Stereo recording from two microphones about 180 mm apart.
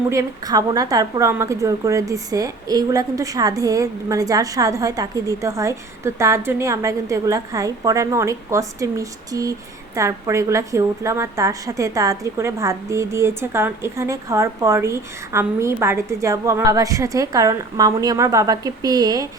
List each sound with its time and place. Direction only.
0.1 s a woman's voice: 20° right (ahead or behind)